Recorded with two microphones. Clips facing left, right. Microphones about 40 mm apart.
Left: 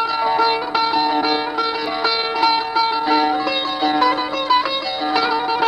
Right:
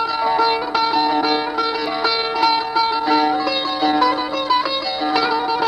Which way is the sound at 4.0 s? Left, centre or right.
Left.